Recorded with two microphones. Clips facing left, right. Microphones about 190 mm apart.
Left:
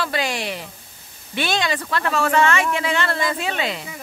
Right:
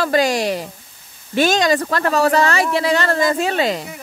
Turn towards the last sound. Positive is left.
turn(degrees=-40)  # may be behind; listen again after turning